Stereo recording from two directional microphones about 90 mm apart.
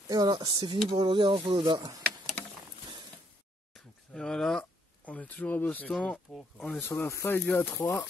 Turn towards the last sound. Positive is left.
turn(degrees=25)  # may be behind; listen again after turning